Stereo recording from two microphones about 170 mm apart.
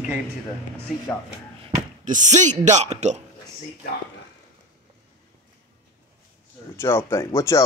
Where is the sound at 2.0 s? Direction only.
45° right (ahead or behind).